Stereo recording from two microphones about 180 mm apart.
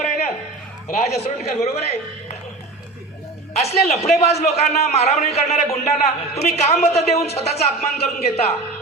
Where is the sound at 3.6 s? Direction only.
35° left (ahead or behind).